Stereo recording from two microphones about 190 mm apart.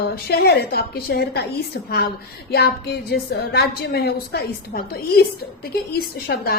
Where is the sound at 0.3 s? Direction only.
55° left (ahead or behind).